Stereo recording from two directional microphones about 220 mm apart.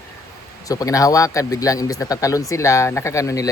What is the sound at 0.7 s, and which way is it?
Speech, 15° left (ahead or behind).